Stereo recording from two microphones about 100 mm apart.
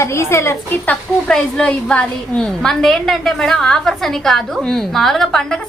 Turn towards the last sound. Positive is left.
turn(degrees=5)  # may be behind; listen again after turning